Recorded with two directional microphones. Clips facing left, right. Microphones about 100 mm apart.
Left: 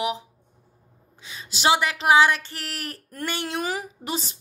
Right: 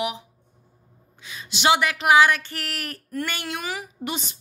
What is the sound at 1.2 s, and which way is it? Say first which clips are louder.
A woman's voice: even; 30° left (ahead or behind).